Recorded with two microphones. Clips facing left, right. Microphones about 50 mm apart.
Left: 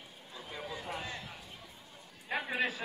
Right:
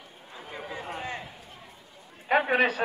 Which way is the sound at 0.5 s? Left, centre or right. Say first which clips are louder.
Right 4 dB; right.